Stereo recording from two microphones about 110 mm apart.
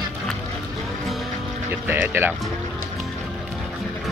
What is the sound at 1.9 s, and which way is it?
Speech, 20° right (ahead or behind).